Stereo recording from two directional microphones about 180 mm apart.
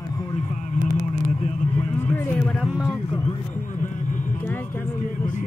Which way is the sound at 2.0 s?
10° left (ahead or behind).